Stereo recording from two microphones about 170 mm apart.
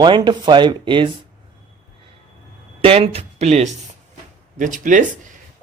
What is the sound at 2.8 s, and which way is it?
Speech, 35° right (ahead or behind).